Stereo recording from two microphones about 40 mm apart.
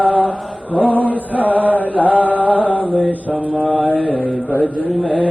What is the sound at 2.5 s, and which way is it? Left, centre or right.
Music, right.